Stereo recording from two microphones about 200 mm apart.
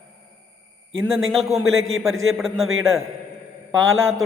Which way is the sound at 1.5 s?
15° right (ahead or behind).